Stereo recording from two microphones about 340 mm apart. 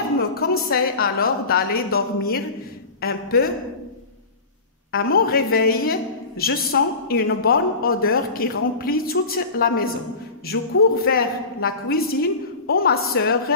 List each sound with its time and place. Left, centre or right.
0.2 s a woman's voice: left
4.9 s a woman's voice: left
11.1 s a woman's voice: left